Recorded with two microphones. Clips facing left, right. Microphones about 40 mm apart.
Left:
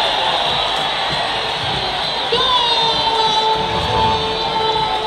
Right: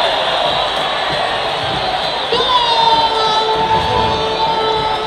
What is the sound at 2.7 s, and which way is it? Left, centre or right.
Emergency vehicle, centre.